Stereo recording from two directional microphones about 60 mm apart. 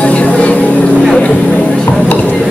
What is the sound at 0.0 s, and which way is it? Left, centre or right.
Vehicle, left.